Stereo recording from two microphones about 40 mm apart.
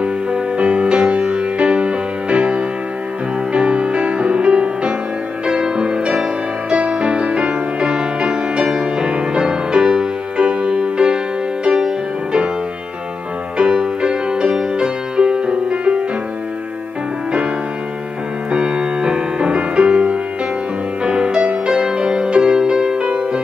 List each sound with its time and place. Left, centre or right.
0.0 s music: right
13.6 s music: right
18.5 s music: right